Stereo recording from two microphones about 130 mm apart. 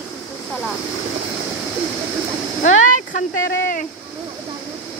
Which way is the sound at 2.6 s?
80° left.